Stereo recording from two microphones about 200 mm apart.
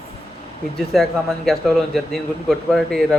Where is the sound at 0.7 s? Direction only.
Centre (ahead or behind).